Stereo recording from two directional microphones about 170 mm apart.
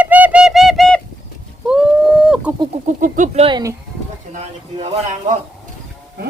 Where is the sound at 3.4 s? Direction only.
20° right (ahead or behind).